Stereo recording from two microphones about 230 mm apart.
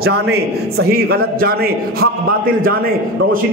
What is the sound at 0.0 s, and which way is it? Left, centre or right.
A man's voice, right.